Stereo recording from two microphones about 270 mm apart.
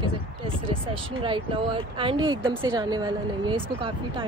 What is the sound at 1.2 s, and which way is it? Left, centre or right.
Speech, centre.